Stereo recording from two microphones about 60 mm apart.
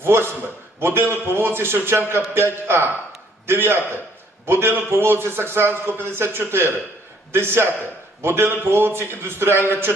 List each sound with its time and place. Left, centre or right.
0.0 s a man's voice: right